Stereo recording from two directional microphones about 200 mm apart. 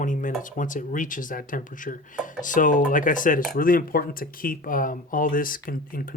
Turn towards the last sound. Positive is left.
turn(degrees=45)  # may be behind; listen again after turning